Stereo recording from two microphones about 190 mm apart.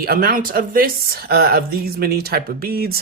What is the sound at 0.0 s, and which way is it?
Speech, 50° right (ahead or behind).